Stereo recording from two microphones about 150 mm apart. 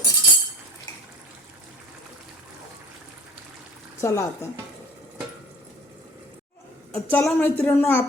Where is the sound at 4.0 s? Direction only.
20° left (ahead or behind).